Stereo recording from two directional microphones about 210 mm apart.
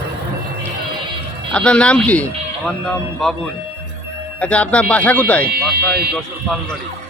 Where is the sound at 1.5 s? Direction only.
5° left (ahead or behind).